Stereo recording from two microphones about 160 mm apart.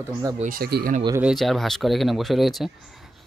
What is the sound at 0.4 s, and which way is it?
Speech, 65° right (ahead or behind).